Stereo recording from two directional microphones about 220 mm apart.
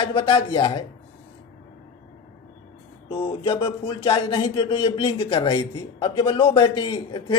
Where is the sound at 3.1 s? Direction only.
25° left (ahead or behind).